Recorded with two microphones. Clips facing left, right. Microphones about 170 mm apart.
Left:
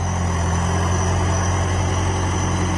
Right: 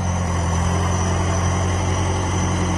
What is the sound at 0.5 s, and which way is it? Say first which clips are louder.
Vehicle: even; centre (ahead or behind).